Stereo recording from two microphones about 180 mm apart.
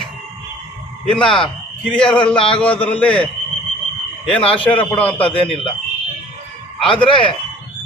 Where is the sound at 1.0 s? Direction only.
5° left (ahead or behind).